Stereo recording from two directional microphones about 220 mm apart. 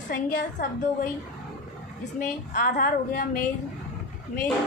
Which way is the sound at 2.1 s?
40° left (ahead or behind).